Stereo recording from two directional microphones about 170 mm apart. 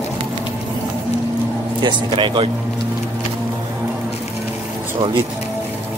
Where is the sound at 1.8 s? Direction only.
25° right (ahead or behind).